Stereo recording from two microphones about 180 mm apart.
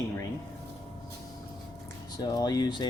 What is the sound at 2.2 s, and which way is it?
Speech, 20° left (ahead or behind).